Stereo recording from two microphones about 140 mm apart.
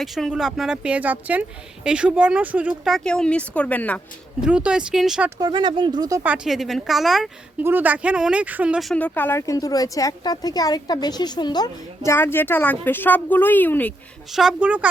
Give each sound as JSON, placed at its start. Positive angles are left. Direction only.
{"t": 0.0, "sound": "speech", "side_deg": 0}
{"t": 4.4, "sound": "speech", "side_deg": -5}
{"t": 5.4, "sound": "speech", "side_deg": -35}
{"t": 6.2, "sound": "speech", "side_deg": -5}
{"t": 7.6, "sound": "speech", "side_deg": -15}
{"t": 8.9, "sound": "speech", "side_deg": 10}
{"t": 12.1, "sound": "speech", "side_deg": 15}
{"t": 14.3, "sound": "speech", "side_deg": -5}